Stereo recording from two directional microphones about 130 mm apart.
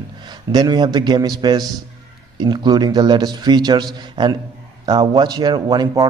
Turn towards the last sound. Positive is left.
turn(degrees=-30)  # may be behind; listen again after turning